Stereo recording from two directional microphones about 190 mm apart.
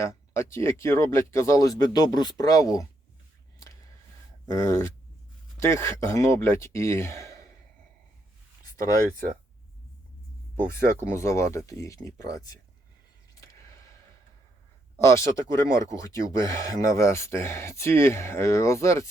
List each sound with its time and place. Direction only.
0.0 s speech: 15° left (ahead or behind)
4.4 s speech: 15° left (ahead or behind)
11.1 s speech: 15° left (ahead or behind)
13.3 s a sound: 15° left (ahead or behind)
14.9 s speech: 15° left (ahead or behind)